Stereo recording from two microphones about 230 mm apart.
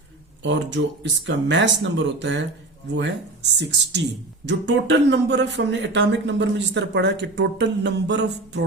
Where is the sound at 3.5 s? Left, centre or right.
Right.